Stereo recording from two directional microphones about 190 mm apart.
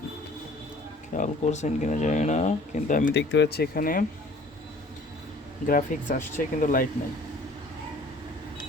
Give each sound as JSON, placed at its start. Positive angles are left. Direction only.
{"t": 1.1, "sound": "speech", "side_deg": 40}
{"t": 3.1, "sound": "speech", "side_deg": 65}
{"t": 5.6, "sound": "speech", "side_deg": 45}